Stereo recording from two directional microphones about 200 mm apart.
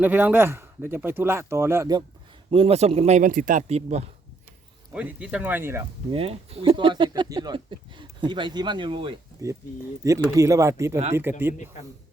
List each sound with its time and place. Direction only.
0.0 s speech: 10° right (ahead or behind)
2.5 s speech: 30° right (ahead or behind)
4.9 s speech: 5° right (ahead or behind)
6.1 s speech: 30° right (ahead or behind); by 11.5 s 10° right (ahead or behind)